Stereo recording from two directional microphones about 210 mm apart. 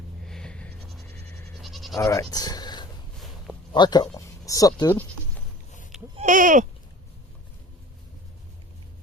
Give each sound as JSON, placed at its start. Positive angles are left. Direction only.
{"t": 0.3, "sound": "goat", "side_deg": 5}
{"t": 1.6, "sound": "bleat", "side_deg": 0}
{"t": 2.0, "sound": "speech", "side_deg": 15}
{"t": 2.3, "sound": "a sound", "side_deg": 20}
{"t": 3.7, "sound": "speech", "side_deg": 20}
{"t": 6.1, "sound": "speech", "side_deg": -40}